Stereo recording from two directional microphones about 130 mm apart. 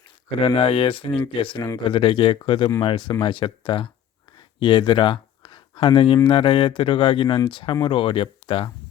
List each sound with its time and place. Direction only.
0.3 s speech: 40° left (ahead or behind)